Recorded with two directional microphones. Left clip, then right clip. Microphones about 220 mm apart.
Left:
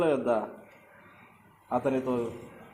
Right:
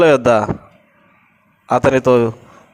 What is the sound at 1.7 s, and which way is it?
Speech, 45° right (ahead or behind).